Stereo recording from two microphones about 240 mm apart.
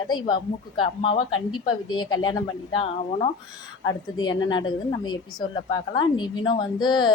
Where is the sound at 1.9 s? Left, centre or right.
Centre.